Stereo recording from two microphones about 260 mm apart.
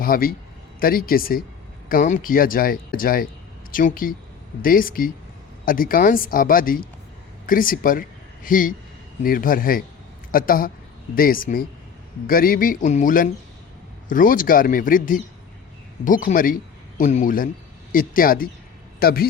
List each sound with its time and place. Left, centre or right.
0.0 s speech: left